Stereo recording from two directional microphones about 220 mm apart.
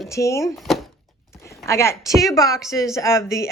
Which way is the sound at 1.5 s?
15° left (ahead or behind).